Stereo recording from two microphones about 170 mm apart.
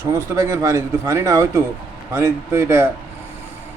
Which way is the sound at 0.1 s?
20° right (ahead or behind).